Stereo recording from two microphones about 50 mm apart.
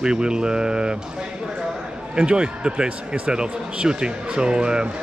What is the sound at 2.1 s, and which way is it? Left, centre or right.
Speech, centre.